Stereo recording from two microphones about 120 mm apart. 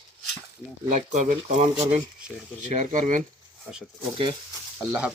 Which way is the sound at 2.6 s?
90° right.